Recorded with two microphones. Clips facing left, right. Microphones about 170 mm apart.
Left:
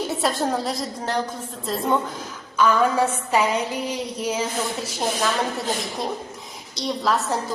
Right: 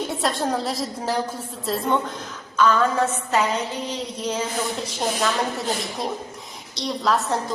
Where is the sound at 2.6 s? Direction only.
10° left (ahead or behind).